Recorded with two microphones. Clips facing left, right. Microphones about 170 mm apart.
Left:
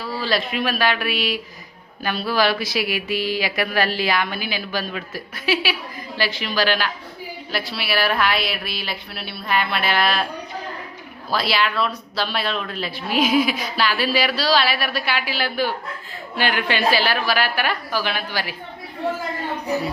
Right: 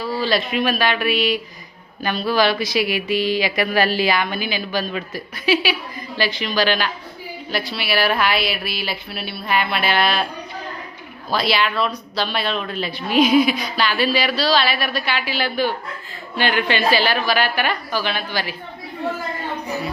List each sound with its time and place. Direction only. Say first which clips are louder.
0.2 s speech: right 2 dB; centre (ahead or behind)
11.3 s speech: right 2 dB; centre (ahead or behind)